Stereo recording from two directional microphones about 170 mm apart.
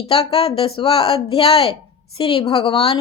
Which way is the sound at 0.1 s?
35° left (ahead or behind).